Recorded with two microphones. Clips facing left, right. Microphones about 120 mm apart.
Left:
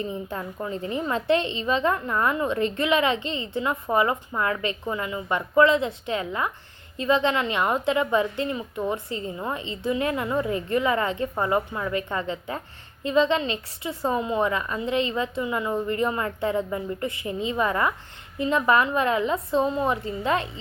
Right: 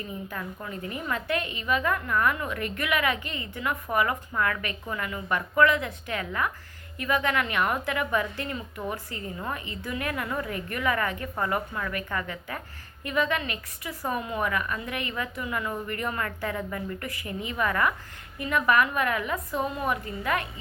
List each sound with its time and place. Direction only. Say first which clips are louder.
0.0 s a woman's voice: left 5 dB; 25° left (ahead or behind)